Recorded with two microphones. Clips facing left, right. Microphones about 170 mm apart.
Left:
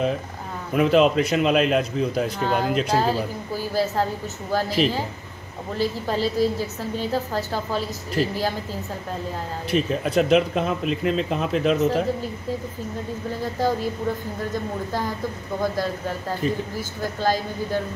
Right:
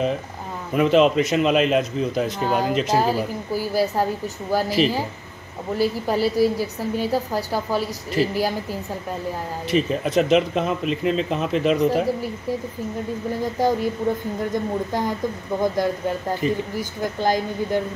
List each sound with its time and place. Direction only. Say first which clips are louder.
0.7 s a man's voice: right 1 dB; centre (ahead or behind)
3.0 s a woman's voice: right 2 dB; 10° right (ahead or behind)
9.7 s a man's voice: right 2 dB; centre (ahead or behind)
13.4 s a woman's voice: right 2 dB; 15° right (ahead or behind)